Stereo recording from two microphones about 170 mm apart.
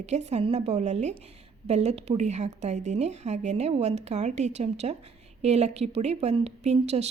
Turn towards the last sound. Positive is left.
turn(degrees=-40)  # may be behind; listen again after turning